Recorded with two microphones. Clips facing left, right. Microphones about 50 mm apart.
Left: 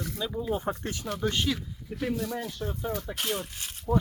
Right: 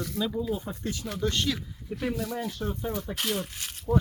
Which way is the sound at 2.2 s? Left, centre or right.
Centre.